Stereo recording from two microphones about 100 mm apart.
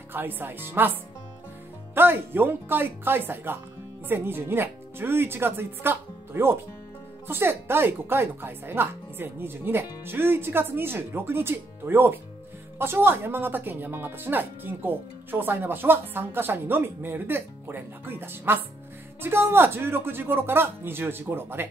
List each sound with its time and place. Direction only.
0.1 s speech: 20° right (ahead or behind)
2.0 s speech: 20° right (ahead or behind)